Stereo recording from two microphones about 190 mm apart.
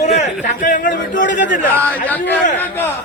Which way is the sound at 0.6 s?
45° left (ahead or behind).